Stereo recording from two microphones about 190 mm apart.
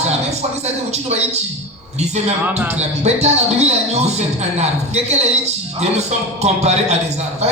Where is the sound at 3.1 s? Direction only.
35° right (ahead or behind).